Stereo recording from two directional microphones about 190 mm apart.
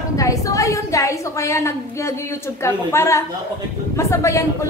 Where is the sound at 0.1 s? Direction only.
15° left (ahead or behind).